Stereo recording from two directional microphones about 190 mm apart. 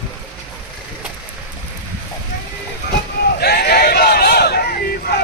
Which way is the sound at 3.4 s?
55° left (ahead or behind).